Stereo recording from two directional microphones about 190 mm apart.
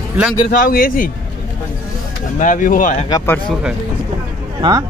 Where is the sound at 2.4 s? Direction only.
45° left (ahead or behind).